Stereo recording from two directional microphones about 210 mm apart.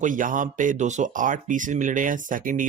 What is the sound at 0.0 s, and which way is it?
Speech, 40° right (ahead or behind).